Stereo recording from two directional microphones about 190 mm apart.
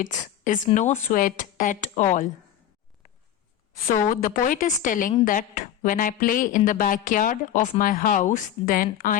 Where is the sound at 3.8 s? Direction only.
45° left (ahead or behind).